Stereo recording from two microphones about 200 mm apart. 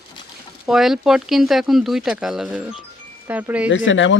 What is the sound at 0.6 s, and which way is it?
Speech, centre (ahead or behind).